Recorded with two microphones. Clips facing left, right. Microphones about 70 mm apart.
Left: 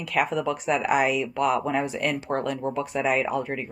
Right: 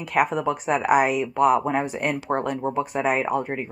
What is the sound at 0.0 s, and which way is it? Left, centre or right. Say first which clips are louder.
Speech: right 3 dB; right.